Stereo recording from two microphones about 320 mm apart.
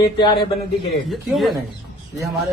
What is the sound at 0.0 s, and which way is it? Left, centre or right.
Speech, centre.